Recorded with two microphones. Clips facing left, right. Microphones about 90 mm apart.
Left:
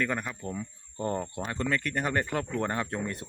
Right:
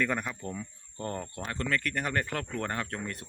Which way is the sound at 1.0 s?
15° left (ahead or behind).